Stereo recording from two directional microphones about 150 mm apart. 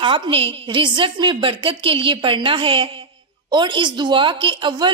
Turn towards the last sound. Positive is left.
turn(degrees=-30)  # may be behind; listen again after turning